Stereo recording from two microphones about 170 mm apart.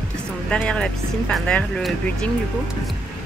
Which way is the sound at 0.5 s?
5° left (ahead or behind).